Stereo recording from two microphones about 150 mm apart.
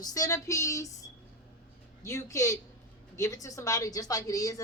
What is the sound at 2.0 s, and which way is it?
A woman's voice, 20° left (ahead or behind).